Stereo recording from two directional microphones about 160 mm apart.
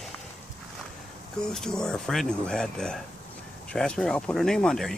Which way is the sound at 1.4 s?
5° left (ahead or behind).